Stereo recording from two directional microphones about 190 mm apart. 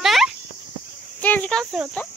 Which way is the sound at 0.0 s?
Centre (ahead or behind).